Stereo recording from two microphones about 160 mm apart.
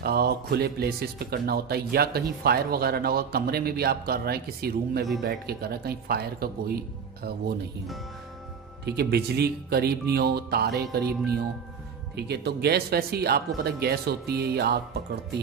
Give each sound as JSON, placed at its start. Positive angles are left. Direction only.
{"t": 0.0, "sound": "speech", "side_deg": -80}
{"t": 8.8, "sound": "speech", "side_deg": -90}
{"t": 12.2, "sound": "speech", "side_deg": -90}